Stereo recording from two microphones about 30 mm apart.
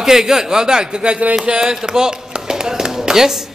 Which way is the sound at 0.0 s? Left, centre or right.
Centre.